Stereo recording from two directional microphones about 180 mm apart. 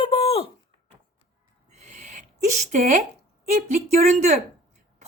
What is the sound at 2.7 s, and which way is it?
A woman's voice, 40° right (ahead or behind).